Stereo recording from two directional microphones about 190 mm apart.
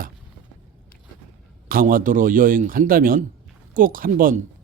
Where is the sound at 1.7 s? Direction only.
50° right (ahead or behind).